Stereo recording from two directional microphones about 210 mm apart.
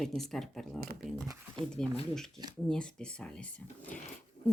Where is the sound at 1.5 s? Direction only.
5° left (ahead or behind).